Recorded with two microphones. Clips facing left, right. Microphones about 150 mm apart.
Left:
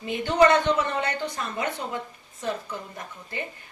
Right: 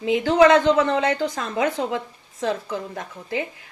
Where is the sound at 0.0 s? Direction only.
90° right.